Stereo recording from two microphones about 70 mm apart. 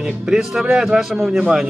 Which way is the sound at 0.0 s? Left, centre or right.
Centre.